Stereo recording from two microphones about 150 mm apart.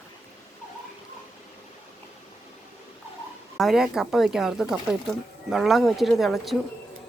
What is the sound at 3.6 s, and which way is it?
Speech, centre (ahead or behind).